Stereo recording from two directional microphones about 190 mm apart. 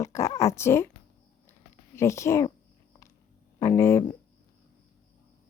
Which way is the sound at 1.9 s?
15° left (ahead or behind).